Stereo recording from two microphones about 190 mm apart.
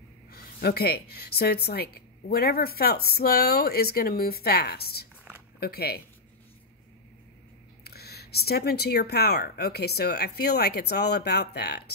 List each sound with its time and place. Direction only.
0.3 s a woman's voice: 55° left (ahead or behind)
7.8 s speech: 55° left (ahead or behind)